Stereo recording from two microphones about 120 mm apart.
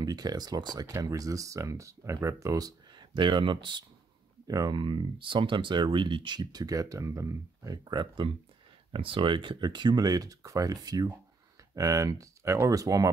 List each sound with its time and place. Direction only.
0.0 s speech: 35° right (ahead or behind)
8.9 s speech: 45° right (ahead or behind); by 13.1 s 30° right (ahead or behind)